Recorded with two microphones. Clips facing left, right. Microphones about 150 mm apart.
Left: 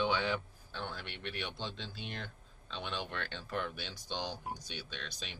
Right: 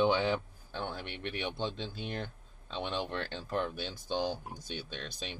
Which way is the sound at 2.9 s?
45° right (ahead or behind).